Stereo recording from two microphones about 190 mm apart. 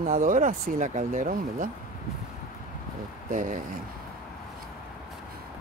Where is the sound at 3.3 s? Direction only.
40° right (ahead or behind).